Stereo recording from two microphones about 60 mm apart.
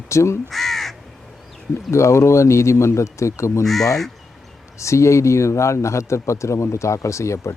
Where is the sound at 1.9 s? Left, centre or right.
Left.